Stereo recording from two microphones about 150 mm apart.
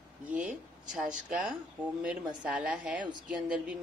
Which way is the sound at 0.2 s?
10° right (ahead or behind).